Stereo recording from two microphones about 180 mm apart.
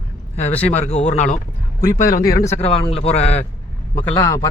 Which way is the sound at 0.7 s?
40° left (ahead or behind).